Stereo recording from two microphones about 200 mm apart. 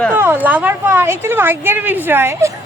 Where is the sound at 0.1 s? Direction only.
10° right (ahead or behind).